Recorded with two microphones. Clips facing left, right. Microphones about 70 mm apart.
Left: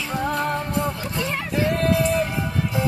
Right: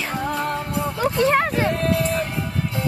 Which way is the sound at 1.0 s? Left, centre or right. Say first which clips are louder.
Right 9 dB; right.